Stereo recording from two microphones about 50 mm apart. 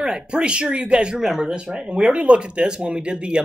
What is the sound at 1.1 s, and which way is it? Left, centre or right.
Speech, centre.